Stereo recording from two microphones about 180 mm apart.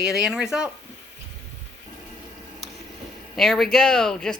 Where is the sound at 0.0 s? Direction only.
Centre (ahead or behind).